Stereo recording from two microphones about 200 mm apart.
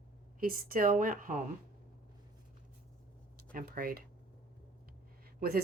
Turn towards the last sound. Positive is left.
turn(degrees=-50)  # may be behind; listen again after turning